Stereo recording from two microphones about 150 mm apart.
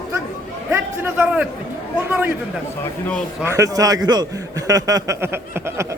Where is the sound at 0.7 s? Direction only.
10° right (ahead or behind).